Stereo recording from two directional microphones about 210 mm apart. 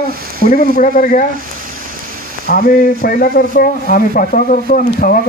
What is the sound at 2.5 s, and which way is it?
Speech, 45° left (ahead or behind).